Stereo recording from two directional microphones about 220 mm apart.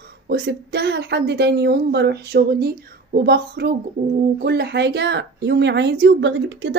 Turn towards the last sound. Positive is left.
turn(degrees=-55)  # may be behind; listen again after turning